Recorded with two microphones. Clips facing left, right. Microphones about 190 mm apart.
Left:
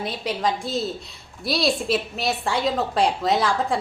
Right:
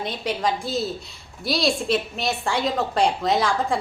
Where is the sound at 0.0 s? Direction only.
Centre (ahead or behind).